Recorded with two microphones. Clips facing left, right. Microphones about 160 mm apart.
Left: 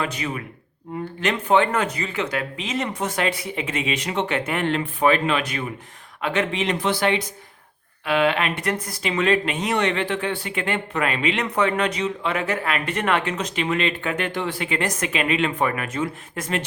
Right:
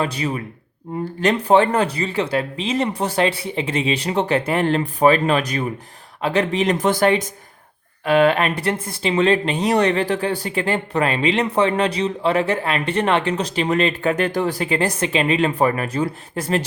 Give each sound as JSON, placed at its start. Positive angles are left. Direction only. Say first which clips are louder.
{"t": 0.0, "sound": "speech", "louder": "right 4 dB", "side_deg": -35}